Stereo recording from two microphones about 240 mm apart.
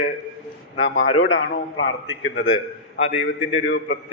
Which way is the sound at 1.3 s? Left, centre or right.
Left.